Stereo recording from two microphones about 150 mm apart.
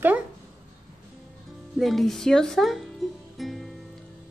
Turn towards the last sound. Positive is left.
turn(degrees=0)  # may be behind; listen again after turning